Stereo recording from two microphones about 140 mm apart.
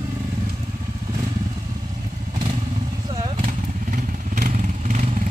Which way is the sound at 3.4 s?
70° right (ahead or behind).